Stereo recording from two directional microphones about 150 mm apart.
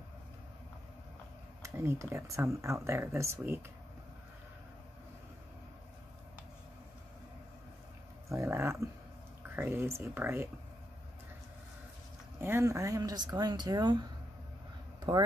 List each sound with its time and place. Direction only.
1.6 s speech: 20° right (ahead or behind)
8.3 s speech: 15° right (ahead or behind)
12.4 s speech: 15° right (ahead or behind)
15.0 s a sound: 25° right (ahead or behind)